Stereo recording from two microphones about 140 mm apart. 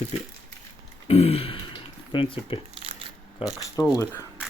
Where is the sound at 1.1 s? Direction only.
45° left (ahead or behind).